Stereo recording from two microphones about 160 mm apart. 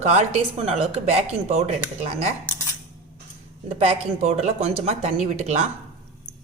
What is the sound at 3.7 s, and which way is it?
A woman's voice, 40° right (ahead or behind).